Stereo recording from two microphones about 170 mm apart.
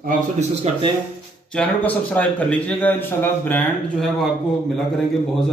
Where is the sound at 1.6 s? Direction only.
10° left (ahead or behind).